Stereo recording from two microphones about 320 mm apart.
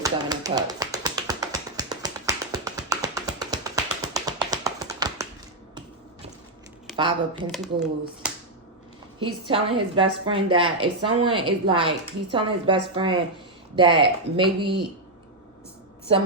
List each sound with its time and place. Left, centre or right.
0.0 s tap: centre
6.9 s speech: centre
7.3 s speech: centre
8.2 s finger snapping: centre
9.2 s a woman's voice: centre